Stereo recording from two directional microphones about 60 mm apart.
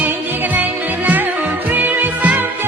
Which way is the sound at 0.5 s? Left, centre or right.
Right.